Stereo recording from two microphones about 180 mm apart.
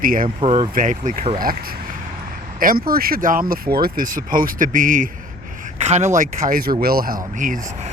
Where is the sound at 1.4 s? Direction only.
50° right (ahead or behind).